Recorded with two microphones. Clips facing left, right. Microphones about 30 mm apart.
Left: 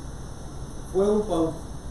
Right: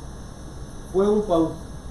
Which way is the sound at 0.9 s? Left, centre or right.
Centre.